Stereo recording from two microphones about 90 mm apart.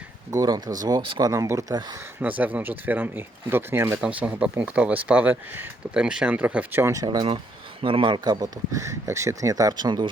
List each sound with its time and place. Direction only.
0.4 s speech: 45° right (ahead or behind)
2.4 s speech: 20° right (ahead or behind)
4.0 s speech: 15° right (ahead or behind)
5.9 s speech: 10° right (ahead or behind)
6.9 s speech: 45° right (ahead or behind)
7.8 s speech: 80° right; by 10.1 s 55° right (ahead or behind)